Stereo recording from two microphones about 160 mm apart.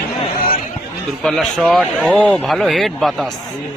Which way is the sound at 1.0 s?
5° left (ahead or behind).